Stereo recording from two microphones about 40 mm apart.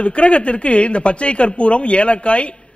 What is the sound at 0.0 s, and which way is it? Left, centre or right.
A man's voice, left.